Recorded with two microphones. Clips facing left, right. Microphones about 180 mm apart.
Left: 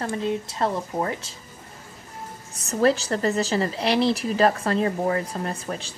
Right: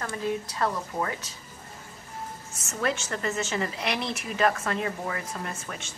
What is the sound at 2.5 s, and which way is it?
A woman's voice, 35° left (ahead or behind).